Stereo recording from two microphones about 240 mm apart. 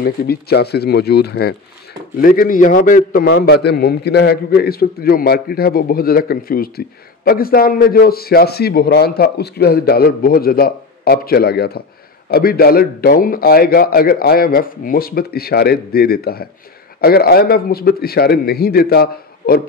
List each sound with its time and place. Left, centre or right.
0.0 s a man's voice: left